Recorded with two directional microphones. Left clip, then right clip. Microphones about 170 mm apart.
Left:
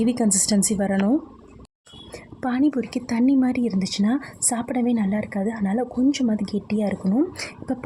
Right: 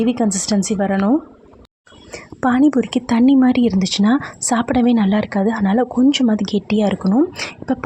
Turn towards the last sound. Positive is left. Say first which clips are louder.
# right 7 dB
turn(degrees=-15)  # may be behind; listen again after turning